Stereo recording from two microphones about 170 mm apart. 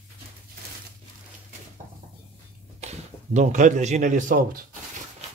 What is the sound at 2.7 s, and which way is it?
A man's voice, 40° right (ahead or behind).